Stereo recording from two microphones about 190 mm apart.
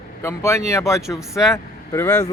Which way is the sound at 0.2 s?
15° left (ahead or behind).